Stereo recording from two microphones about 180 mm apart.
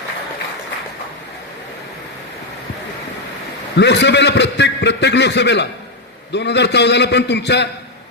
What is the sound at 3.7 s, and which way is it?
A man's voice, 70° left (ahead or behind).